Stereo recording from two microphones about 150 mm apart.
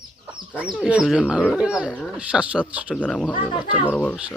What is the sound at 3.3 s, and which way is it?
Speech, 35° left (ahead or behind).